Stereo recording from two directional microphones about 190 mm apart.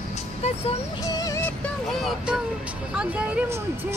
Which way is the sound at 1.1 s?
20° left (ahead or behind).